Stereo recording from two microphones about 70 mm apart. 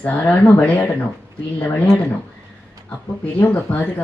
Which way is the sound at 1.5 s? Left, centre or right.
Left.